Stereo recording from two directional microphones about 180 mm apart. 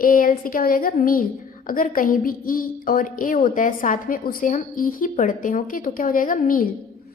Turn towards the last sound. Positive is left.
turn(degrees=50)  # may be behind; listen again after turning